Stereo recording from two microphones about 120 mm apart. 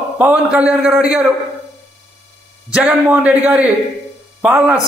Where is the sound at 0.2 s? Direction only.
10° right (ahead or behind).